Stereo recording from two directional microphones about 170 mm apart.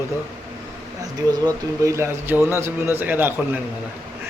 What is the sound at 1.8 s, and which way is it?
A man's voice, 15° right (ahead or behind).